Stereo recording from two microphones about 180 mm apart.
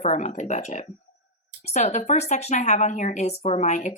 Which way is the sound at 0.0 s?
40° left (ahead or behind).